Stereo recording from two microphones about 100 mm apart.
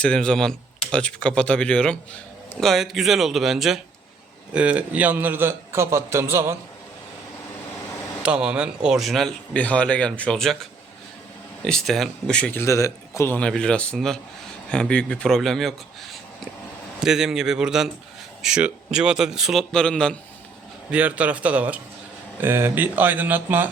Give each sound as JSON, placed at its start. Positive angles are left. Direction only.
{"t": 0.0, "sound": "a man's voice", "side_deg": 10}
{"t": 8.2, "sound": "speech", "side_deg": -10}
{"t": 9.6, "sound": "speech", "side_deg": 15}
{"t": 12.5, "sound": "a man's voice", "side_deg": 30}
{"t": 13.3, "sound": "speech", "side_deg": 10}
{"t": 17.0, "sound": "speech", "side_deg": -5}
{"t": 19.7, "sound": "speech", "side_deg": 10}
{"t": 20.9, "sound": "a man's voice", "side_deg": -15}